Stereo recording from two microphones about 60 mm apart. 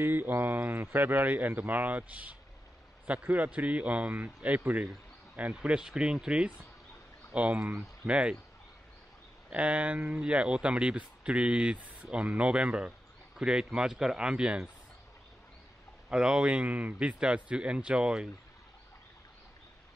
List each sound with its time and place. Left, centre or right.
0.0 s speech: right; by 8.4 s centre
9.5 s speech: centre
16.1 s speech: centre